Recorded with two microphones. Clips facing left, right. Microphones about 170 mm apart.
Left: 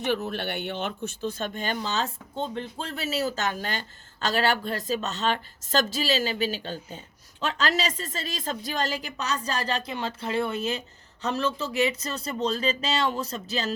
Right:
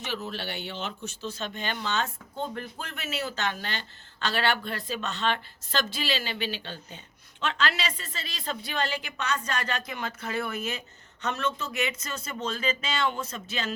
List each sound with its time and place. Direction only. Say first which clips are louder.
0.0 s speech: left 6 dB; 55° left (ahead or behind); by 13.7 s 35° left (ahead or behind)